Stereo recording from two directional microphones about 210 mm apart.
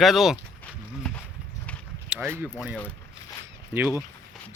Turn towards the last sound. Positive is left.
turn(degrees=-10)  # may be behind; listen again after turning